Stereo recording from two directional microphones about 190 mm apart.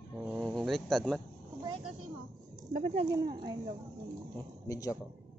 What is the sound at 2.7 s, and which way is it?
Speech, 35° right (ahead or behind).